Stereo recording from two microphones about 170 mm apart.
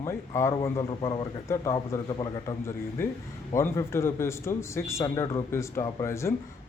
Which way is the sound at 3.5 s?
15° left (ahead or behind).